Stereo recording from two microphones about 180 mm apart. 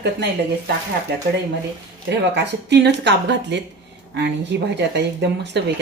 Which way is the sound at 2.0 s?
75° right (ahead or behind).